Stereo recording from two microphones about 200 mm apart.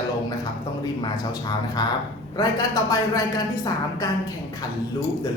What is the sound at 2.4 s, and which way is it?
Speech, 15° left (ahead or behind).